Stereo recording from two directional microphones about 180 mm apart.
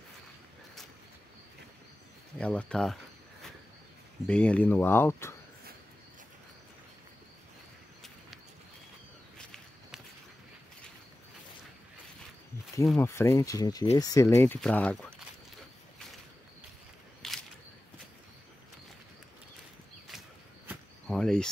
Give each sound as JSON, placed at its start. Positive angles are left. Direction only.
{"t": 2.3, "sound": "speech", "side_deg": 5}
{"t": 4.3, "sound": "speech", "side_deg": 5}
{"t": 13.0, "sound": "speech", "side_deg": 15}
{"t": 17.2, "sound": "a sound", "side_deg": 0}
{"t": 21.1, "sound": "cricket", "side_deg": 5}